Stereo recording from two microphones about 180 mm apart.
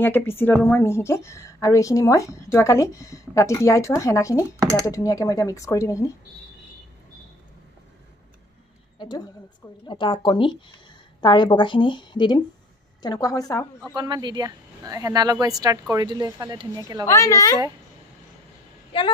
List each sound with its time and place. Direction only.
0.0 s a woman's voice: 10° left (ahead or behind)
8.9 s a sound: 25° left (ahead or behind)
9.8 s a woman's voice: 25° left (ahead or behind)
13.9 s speech: 25° right (ahead or behind)
17.0 s a woman's voice: 15° left (ahead or behind)